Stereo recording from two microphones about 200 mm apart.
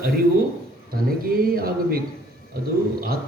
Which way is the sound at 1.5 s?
45° right (ahead or behind).